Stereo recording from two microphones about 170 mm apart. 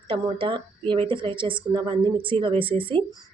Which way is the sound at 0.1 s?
30° right (ahead or behind).